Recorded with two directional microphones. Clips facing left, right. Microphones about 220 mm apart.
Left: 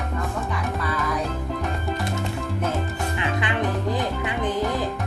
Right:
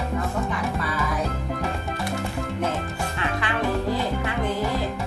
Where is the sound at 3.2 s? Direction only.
20° left (ahead or behind).